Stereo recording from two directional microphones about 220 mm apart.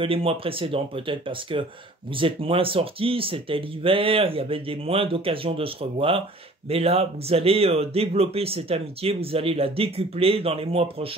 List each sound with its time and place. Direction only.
0.0 s speech: 25° right (ahead or behind)